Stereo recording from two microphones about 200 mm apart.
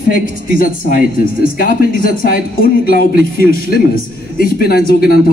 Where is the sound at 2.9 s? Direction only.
45° left (ahead or behind).